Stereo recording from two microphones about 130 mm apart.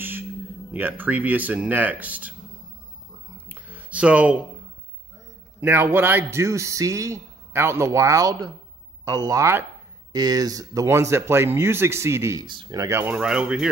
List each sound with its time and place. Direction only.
0.7 s speech: 15° right (ahead or behind)
3.4 s a sound: 15° right (ahead or behind)
5.6 s a man's voice: 15° right (ahead or behind)
12.4 s a man's voice: 35° right (ahead or behind)
13.1 s speech: 5° right (ahead or behind)